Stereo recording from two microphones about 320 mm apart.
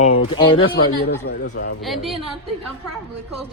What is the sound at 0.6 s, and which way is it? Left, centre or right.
Speech, left.